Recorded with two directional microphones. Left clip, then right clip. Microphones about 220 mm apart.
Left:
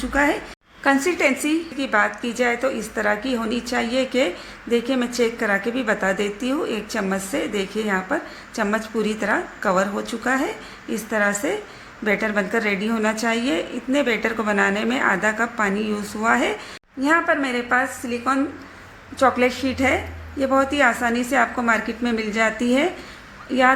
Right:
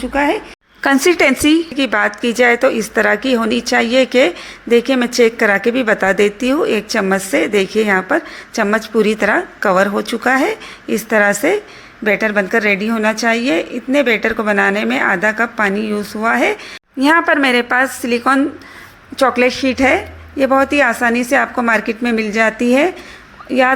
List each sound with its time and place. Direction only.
0.0 s a woman's voice: 5° right (ahead or behind)
1.0 s a woman's voice: 35° right (ahead or behind); by 16.6 s 20° right (ahead or behind)
17.0 s a woman's voice: 40° right (ahead or behind)